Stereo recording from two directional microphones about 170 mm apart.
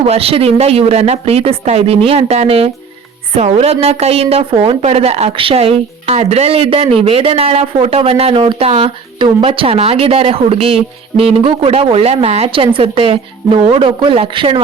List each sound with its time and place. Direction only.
0.0 s speech: 35° right (ahead or behind)